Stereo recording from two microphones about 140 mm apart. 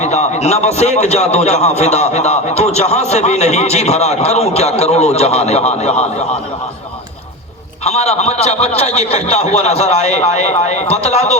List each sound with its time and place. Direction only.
0.0 s a man's voice: 50° left (ahead or behind)
7.9 s a man's voice: 50° left (ahead or behind)